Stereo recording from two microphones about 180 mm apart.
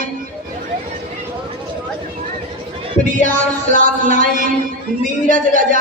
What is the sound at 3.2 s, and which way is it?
Speech, 50° right (ahead or behind).